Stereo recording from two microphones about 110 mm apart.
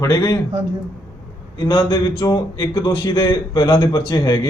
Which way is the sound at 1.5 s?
40° left (ahead or behind).